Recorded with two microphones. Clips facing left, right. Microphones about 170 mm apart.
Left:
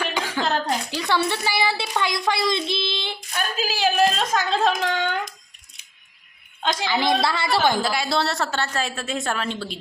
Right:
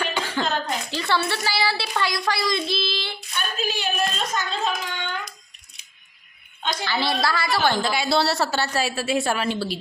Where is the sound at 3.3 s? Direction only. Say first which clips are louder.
Left 1 dB; 90° left.